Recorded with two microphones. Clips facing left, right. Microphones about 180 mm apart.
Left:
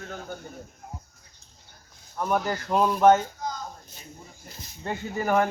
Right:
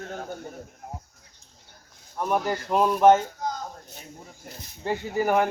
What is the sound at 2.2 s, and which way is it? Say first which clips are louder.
Speech: right 1 dB; 5° right (ahead or behind).